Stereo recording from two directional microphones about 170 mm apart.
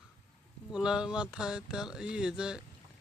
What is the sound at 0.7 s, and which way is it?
Speech, 5° right (ahead or behind).